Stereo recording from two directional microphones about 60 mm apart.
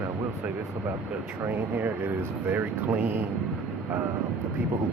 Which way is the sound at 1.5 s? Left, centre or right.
Right.